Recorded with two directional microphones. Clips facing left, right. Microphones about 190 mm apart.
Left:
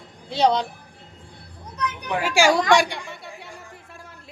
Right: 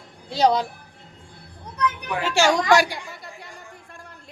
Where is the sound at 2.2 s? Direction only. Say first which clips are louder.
Left 1 dB; 10° left (ahead or behind).